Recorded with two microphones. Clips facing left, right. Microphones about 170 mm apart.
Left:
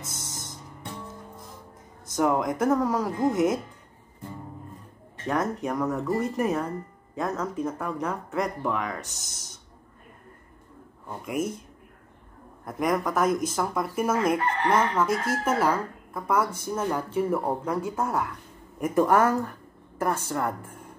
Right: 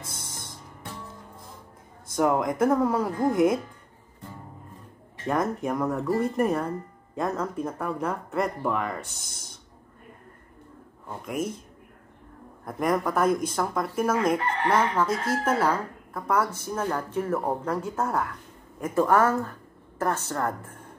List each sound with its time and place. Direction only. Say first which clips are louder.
0.3 s music: left 1 dB; 5° left (ahead or behind)
2.1 s speech: right 1 dB; centre (ahead or behind)
5.2 s speech: right 1 dB; centre (ahead or behind)
12.6 s a woman's voice: even; 5° left (ahead or behind)